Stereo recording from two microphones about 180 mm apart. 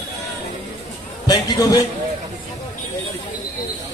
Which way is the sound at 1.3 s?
20° left (ahead or behind).